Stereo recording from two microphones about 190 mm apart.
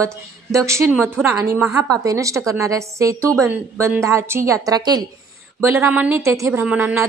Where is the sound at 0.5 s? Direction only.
15° right (ahead or behind).